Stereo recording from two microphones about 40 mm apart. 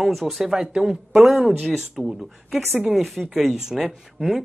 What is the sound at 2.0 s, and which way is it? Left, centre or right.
Speech, centre.